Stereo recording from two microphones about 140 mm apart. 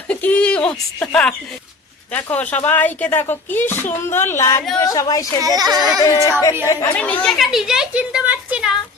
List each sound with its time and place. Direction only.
0.1 s a woman's voice: 10° left (ahead or behind); by 5.3 s 25° left (ahead or behind)
5.4 s speech: 25° right (ahead or behind)
5.7 s speech: 5° right (ahead or behind)
6.1 s a woman's voice: 20° left (ahead or behind)
6.9 s speech: 10° left (ahead or behind); by 8.7 s 10° right (ahead or behind)